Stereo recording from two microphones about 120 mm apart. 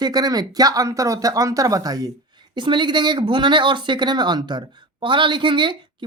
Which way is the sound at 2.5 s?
40° right (ahead or behind).